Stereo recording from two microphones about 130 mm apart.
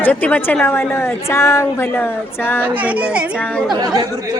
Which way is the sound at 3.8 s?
30° right (ahead or behind).